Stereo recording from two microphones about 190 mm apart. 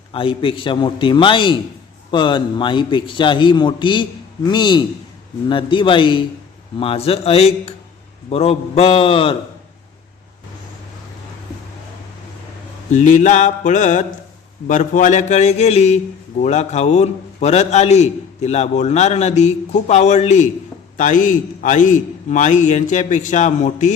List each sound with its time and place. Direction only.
0.1 s a man's voice: 25° left (ahead or behind)
12.9 s a man's voice: 40° left (ahead or behind)